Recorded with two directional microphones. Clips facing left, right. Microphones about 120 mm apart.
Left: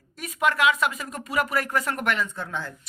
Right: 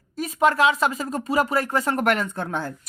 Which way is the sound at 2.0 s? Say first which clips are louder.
Right 5 dB; 50° right (ahead or behind).